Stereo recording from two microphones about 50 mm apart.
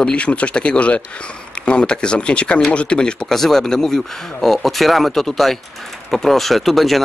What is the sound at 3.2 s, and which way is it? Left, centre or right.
Speech, centre.